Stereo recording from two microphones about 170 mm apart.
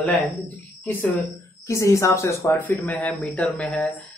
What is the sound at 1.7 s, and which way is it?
Speech, 15° left (ahead or behind).